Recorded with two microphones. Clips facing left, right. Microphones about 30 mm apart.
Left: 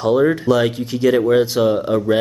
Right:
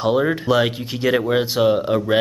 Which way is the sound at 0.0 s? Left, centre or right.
Centre.